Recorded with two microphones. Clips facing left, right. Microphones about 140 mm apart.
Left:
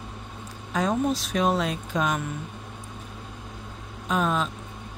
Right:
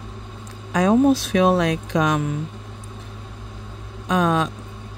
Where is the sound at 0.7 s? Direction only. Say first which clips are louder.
Right 9 dB; 70° right (ahead or behind).